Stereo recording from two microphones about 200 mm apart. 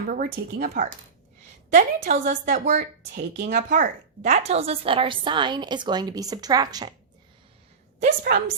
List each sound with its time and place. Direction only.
0.1 s a woman's voice: 45° right (ahead or behind); by 6.9 s 20° right (ahead or behind)
7.9 s a woman's voice: 40° right (ahead or behind)